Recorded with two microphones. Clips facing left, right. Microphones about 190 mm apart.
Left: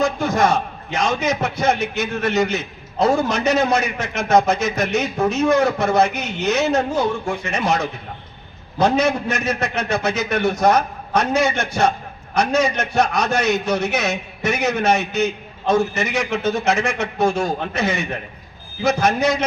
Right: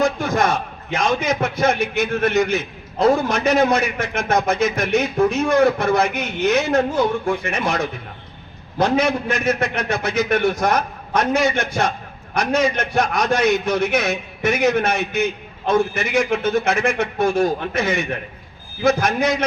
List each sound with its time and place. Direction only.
0.9 s a man's voice: 55° right (ahead or behind)
8.8 s a man's voice: 55° right (ahead or behind)